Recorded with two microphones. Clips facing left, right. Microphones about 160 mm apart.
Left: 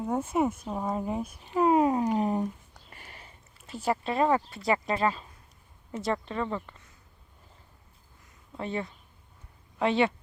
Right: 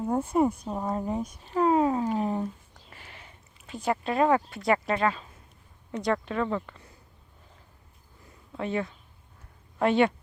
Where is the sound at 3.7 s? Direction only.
5° left (ahead or behind).